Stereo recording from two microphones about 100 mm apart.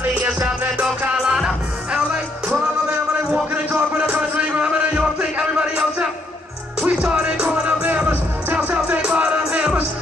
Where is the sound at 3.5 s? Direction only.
15° right (ahead or behind).